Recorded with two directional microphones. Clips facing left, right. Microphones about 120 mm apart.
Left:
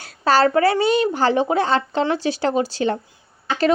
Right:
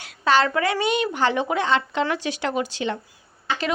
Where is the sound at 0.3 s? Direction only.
35° left (ahead or behind).